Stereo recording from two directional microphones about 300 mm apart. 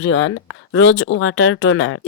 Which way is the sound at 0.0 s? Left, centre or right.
Left.